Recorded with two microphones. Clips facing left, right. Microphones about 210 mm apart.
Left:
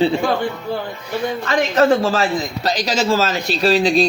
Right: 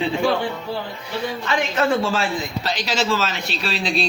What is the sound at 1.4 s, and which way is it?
A man's voice, 40° left (ahead or behind).